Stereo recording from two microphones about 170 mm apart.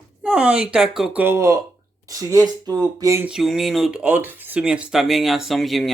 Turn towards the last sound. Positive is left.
turn(degrees=0)  # may be behind; listen again after turning